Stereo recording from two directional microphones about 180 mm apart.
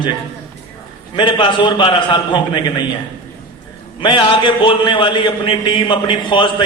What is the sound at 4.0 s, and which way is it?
A man's voice, 25° left (ahead or behind).